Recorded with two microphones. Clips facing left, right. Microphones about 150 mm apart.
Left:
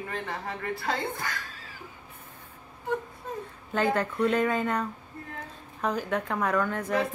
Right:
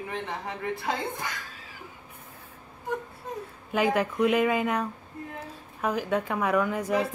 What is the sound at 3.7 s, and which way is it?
Speech, 10° right (ahead or behind).